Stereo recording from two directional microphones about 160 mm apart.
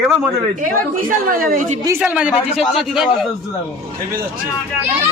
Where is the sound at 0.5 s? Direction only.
55° right (ahead or behind).